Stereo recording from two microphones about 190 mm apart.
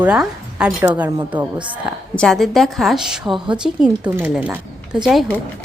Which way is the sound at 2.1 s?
Centre (ahead or behind).